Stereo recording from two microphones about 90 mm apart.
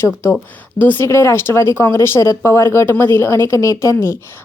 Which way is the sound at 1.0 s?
30° left (ahead or behind).